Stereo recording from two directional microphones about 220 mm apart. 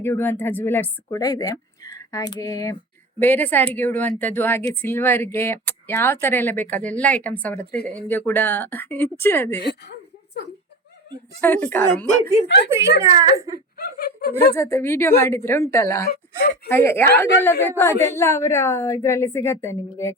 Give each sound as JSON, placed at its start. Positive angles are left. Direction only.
{"t": 0.0, "sound": "a woman's voice", "side_deg": 10}
{"t": 11.3, "sound": "a woman's voice", "side_deg": 10}
{"t": 13.0, "sound": "speech", "side_deg": -15}
{"t": 13.7, "sound": "speech", "side_deg": 45}
{"t": 14.5, "sound": "a woman's voice", "side_deg": 10}
{"t": 16.0, "sound": "speech", "side_deg": 45}
{"t": 16.6, "sound": "a woman's voice", "side_deg": 10}